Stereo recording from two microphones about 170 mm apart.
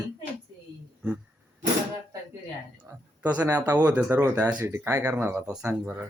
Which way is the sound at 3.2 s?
10° right (ahead or behind).